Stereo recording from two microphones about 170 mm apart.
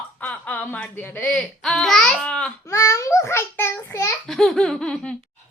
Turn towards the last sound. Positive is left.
turn(degrees=5)  # may be behind; listen again after turning